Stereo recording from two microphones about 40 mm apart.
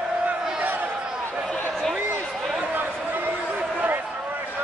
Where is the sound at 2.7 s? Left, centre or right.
Right.